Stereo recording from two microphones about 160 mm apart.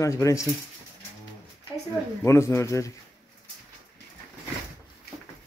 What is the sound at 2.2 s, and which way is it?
Speech, 15° left (ahead or behind).